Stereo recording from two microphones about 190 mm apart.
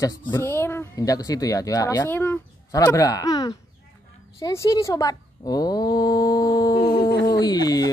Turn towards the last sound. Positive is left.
turn(degrees=20)  # may be behind; listen again after turning